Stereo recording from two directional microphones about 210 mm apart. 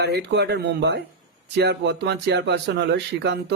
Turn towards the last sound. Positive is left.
turn(degrees=-55)  # may be behind; listen again after turning